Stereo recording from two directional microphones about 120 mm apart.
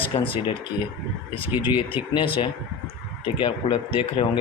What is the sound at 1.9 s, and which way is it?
A man's voice, 50° left (ahead or behind).